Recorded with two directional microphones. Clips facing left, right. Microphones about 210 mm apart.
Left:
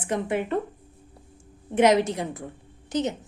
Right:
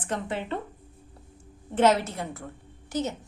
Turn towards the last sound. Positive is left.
turn(degrees=20)  # may be behind; listen again after turning